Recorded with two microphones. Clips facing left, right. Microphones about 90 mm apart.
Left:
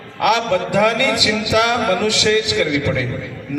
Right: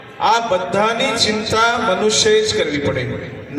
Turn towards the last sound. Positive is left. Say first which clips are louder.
# even
turn(degrees=-30)  # may be behind; listen again after turning